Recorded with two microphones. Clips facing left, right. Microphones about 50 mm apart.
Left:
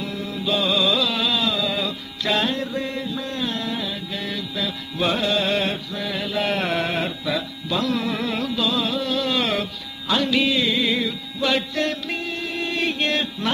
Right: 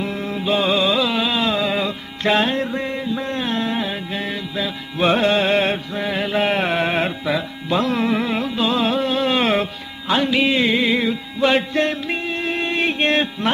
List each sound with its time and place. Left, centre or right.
0.0 s music: right